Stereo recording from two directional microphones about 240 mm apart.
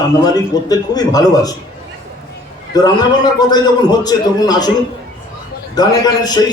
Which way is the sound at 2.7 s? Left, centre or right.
Centre.